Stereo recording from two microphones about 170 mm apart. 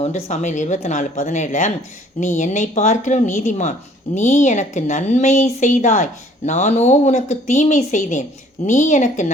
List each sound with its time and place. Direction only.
0.0 s speech: 45° left (ahead or behind)